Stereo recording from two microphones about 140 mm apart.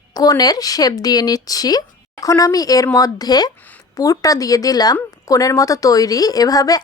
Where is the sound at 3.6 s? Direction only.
10° left (ahead or behind).